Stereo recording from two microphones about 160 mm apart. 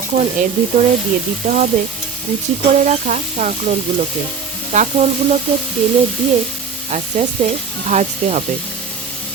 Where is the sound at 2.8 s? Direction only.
50° right (ahead or behind).